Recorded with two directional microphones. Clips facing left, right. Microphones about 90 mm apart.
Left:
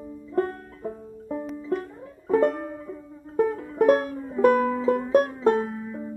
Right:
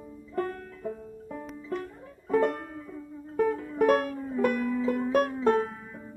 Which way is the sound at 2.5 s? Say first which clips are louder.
Left 5 dB; 10° left (ahead or behind).